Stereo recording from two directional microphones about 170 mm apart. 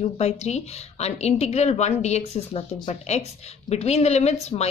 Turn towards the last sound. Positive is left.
turn(degrees=40)  # may be behind; listen again after turning